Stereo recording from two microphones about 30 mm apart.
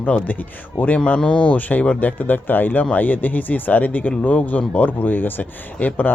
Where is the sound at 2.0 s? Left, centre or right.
Left.